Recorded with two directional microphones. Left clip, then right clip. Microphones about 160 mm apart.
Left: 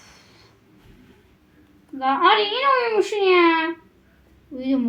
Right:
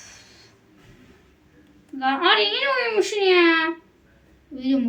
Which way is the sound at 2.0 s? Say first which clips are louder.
Left 2 dB; 15° right (ahead or behind).